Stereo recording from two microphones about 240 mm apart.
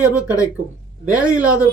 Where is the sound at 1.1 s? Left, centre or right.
Centre.